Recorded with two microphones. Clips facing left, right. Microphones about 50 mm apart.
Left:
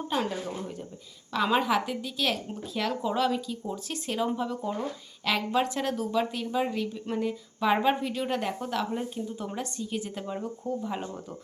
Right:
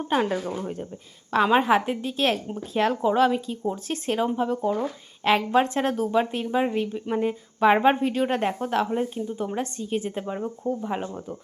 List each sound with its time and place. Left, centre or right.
0.1 s speech: right